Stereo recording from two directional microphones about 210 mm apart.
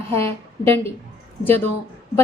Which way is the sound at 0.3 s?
25° right (ahead or behind).